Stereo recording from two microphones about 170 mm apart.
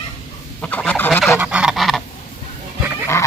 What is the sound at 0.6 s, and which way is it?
Fowl, 10° left (ahead or behind).